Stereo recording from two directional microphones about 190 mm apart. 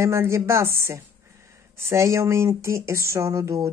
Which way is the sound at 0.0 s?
15° right (ahead or behind).